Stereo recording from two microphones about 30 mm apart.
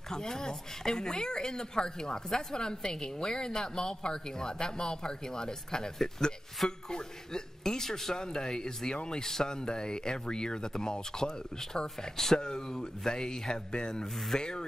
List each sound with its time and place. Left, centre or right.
0.1 s a woman's voice: centre